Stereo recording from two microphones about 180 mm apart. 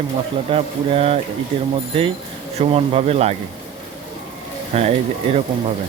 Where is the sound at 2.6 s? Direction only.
35° right (ahead or behind).